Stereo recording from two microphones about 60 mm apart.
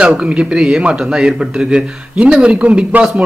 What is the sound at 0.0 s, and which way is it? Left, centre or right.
Speech, centre.